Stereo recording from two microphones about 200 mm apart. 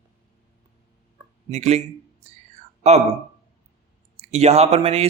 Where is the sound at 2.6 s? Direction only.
35° right (ahead or behind).